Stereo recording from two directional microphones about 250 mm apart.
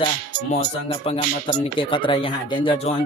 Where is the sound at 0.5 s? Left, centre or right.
Left.